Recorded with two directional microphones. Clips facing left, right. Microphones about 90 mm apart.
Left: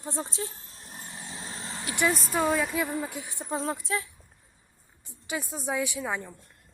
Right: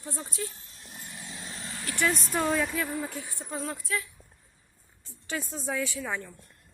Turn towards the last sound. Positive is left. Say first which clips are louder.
# left 2 dB
turn(degrees=15)  # may be behind; listen again after turning